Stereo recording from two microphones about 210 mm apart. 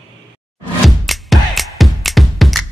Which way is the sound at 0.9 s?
Centre (ahead or behind).